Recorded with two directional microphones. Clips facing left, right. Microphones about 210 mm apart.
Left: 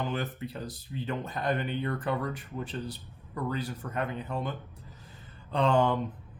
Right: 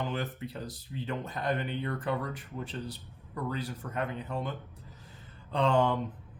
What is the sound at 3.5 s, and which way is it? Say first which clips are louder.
Speech: left 2 dB; 50° left (ahead or behind).